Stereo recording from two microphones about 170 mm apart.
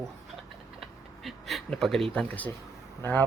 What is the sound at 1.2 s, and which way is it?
Speech, centre (ahead or behind).